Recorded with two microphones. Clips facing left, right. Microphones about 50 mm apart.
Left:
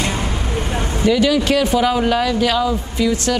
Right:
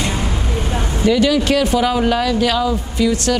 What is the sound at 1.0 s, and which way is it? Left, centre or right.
Speech, centre.